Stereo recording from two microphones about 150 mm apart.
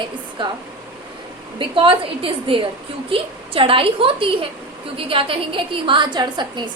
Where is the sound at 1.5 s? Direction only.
35° right (ahead or behind).